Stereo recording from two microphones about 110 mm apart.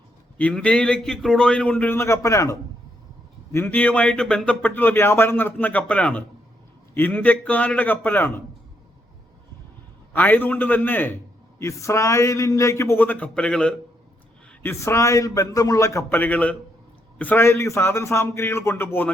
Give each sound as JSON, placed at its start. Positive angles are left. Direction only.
{"t": 0.3, "sound": "speech", "side_deg": 10}
{"t": 10.1, "sound": "a man's voice", "side_deg": 15}
{"t": 14.6, "sound": "a man's voice", "side_deg": 25}
{"t": 16.0, "sound": "a man's voice", "side_deg": 15}